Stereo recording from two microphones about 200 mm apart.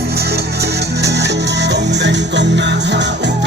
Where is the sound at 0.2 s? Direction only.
55° right (ahead or behind).